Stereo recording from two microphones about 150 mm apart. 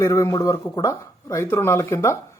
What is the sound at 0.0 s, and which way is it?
Speech, 20° left (ahead or behind).